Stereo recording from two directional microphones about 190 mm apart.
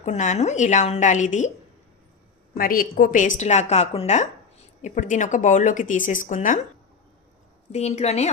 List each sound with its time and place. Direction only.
0.0 s a woman's voice: 40° left (ahead or behind)
2.6 s a woman's voice: 50° left (ahead or behind)
7.7 s a woman's voice: 35° left (ahead or behind)